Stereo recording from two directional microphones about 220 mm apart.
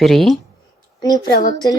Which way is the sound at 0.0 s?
Centre (ahead or behind).